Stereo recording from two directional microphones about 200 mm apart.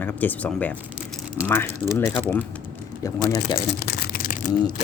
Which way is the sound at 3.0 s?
20° left (ahead or behind).